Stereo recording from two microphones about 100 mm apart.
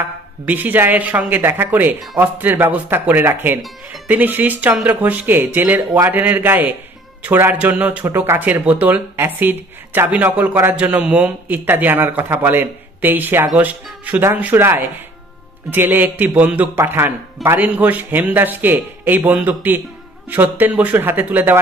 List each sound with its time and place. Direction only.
0.5 s speech: 20° right (ahead or behind)